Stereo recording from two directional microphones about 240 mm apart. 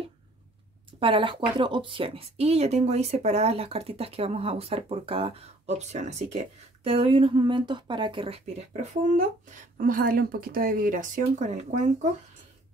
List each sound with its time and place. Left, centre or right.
0.9 s speech: right
9.8 s speech: right